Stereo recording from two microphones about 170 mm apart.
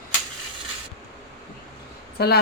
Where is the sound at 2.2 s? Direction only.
70° left (ahead or behind).